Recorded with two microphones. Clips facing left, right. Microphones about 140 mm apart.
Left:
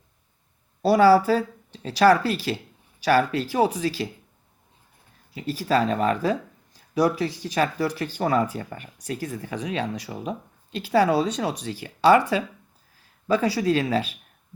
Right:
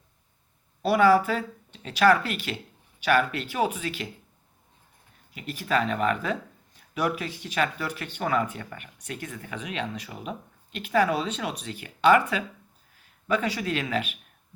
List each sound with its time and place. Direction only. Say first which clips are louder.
0.8 s speech: left 4 dB; 35° left (ahead or behind)
5.3 s speech: left 4 dB; 35° left (ahead or behind)
13.2 s speech: left 5 dB; 35° left (ahead or behind)